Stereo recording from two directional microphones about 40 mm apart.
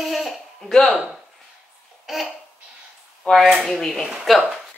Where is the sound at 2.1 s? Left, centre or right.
Centre.